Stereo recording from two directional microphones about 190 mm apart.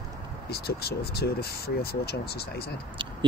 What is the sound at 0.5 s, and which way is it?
Speech, 55° left (ahead or behind).